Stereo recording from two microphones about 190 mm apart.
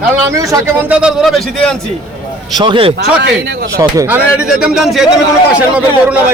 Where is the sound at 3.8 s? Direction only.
15° right (ahead or behind).